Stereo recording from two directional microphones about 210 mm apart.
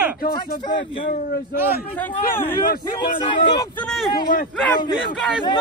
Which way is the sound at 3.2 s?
25° left (ahead or behind).